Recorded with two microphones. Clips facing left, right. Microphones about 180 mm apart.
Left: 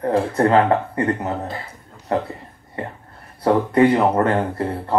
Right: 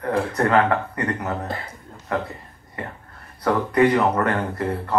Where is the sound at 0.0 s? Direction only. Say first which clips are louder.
Left 4 dB; 30° left (ahead or behind).